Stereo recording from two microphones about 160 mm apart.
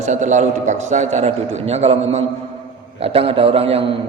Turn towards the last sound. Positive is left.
turn(degrees=-35)  # may be behind; listen again after turning